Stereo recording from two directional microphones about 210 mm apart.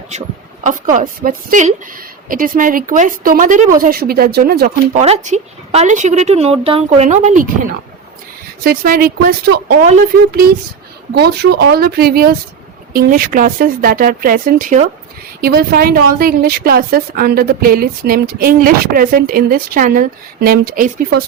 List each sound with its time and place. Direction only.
0.6 s a woman's voice: 40° right (ahead or behind)
4.9 s a woman's voice: 30° right (ahead or behind)
8.6 s a woman's voice: 45° right (ahead or behind)
9.8 s a woman's voice: 35° right (ahead or behind)
11.1 s a woman's voice: 50° right (ahead or behind)